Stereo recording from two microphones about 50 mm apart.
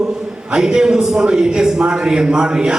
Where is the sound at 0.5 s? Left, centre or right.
Centre.